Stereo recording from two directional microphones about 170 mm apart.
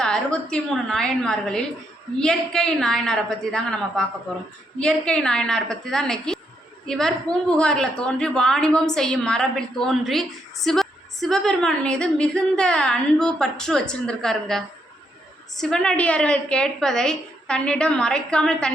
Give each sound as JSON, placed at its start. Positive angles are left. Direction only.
{"t": 0.0, "sound": "a woman's voice", "side_deg": 5}